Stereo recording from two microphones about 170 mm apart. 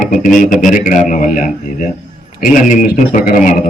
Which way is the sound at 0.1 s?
50° left (ahead or behind).